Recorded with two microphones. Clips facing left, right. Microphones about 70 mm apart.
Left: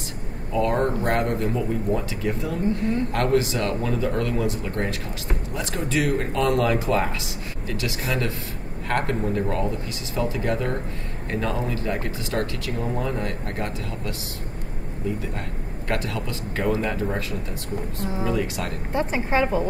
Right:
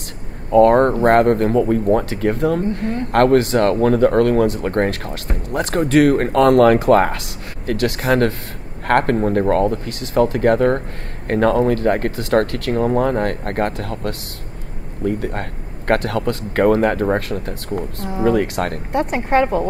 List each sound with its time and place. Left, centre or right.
0.5 s speech: right